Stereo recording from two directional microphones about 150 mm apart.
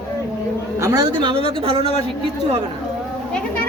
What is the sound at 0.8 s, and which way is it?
A woman's voice, 25° right (ahead or behind).